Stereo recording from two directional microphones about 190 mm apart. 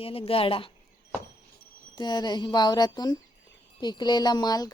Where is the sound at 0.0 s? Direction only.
30° left (ahead or behind).